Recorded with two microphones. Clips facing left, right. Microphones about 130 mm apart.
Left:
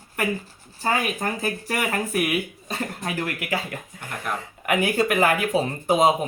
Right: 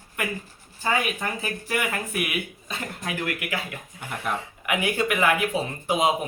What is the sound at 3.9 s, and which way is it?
Speech, 5° right (ahead or behind).